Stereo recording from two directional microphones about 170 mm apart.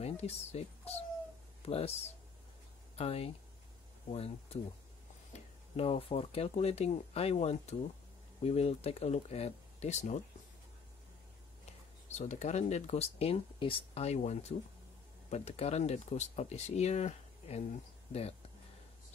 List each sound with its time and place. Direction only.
0.0 s speech: 40° left (ahead or behind)
3.0 s speech: 35° left (ahead or behind)
5.8 s speech: 35° left (ahead or behind)
12.1 s speech: 40° left (ahead or behind)